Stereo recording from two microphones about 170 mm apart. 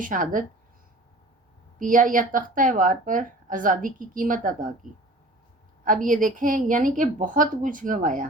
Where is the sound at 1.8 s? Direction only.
50° right (ahead or behind).